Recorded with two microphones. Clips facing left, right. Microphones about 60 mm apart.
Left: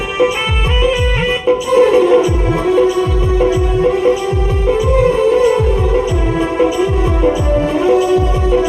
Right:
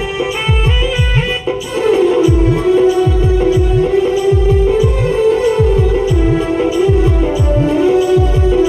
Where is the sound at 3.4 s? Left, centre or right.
Left.